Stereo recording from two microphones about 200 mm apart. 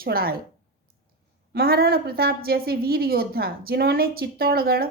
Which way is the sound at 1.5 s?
50° right (ahead or behind).